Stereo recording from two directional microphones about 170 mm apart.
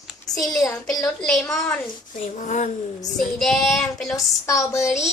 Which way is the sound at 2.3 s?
45° left (ahead or behind).